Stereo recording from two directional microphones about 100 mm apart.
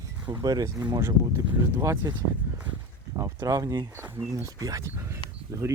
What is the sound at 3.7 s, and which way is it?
Speech, 20° right (ahead or behind).